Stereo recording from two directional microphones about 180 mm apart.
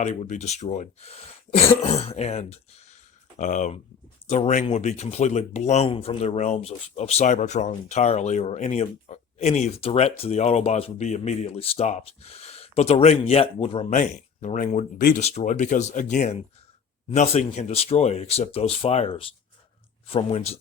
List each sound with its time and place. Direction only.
0.0 s speech: 40° left (ahead or behind)
1.5 s throat clearing: 25° left (ahead or behind)
1.8 s speech: 35° left (ahead or behind)
14.0 s speech: 45° left (ahead or behind)